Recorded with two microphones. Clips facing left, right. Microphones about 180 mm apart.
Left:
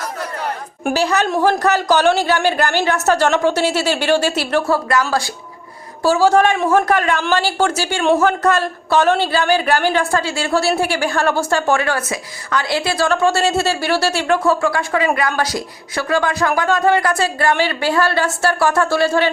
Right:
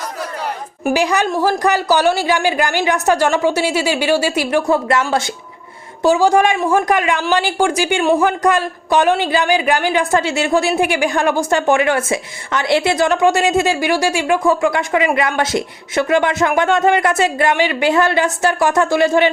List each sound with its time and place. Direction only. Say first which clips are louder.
0.9 s a man's voice: even; 15° right (ahead or behind)